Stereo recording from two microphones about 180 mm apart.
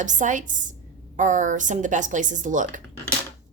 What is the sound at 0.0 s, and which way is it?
A woman's voice, 45° right (ahead or behind).